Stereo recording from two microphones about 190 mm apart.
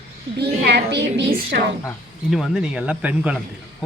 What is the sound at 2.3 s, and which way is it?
Speech, centre (ahead or behind).